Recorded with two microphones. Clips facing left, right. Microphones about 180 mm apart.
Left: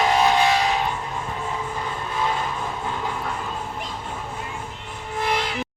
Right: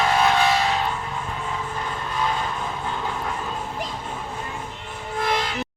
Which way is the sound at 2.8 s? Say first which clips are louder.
Even; 5° left (ahead or behind).